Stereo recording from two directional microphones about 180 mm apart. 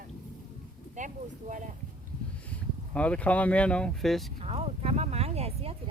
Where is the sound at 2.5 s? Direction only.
5° left (ahead or behind).